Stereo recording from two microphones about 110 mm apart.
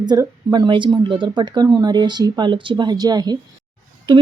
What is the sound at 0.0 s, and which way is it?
A woman's voice, 40° right (ahead or behind).